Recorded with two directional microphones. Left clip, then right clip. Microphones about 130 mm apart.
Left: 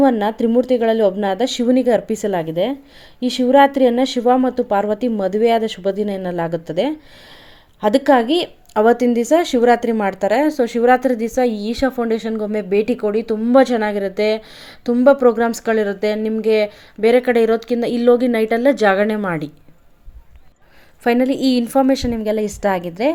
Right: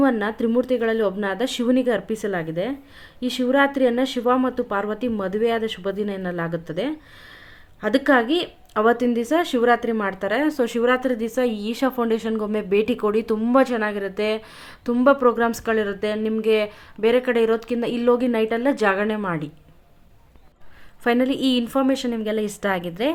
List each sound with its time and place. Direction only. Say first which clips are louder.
0.0 s speech: left 5 dB; 25° left (ahead or behind)
10.5 s a woman's voice: left 4 dB; 15° left (ahead or behind)
10.8 s a woman's voice: left 9 dB; 25° left (ahead or behind); by 13.5 s centre (ahead or behind)
13.5 s speech: left 6 dB; 35° left (ahead or behind)
14.3 s speech: left 6 dB; 20° left (ahead or behind)
21.0 s a woman's voice: left 4 dB; 20° left (ahead or behind)